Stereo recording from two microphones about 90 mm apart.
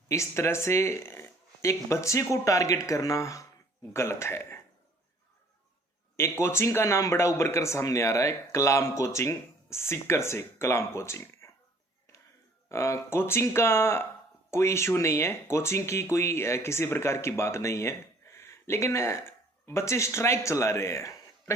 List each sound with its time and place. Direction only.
0.1 s speech: 30° left (ahead or behind)
6.1 s speech: 25° left (ahead or behind)
12.6 s speech: 30° left (ahead or behind)